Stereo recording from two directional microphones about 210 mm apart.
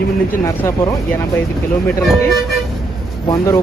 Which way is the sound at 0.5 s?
15° left (ahead or behind).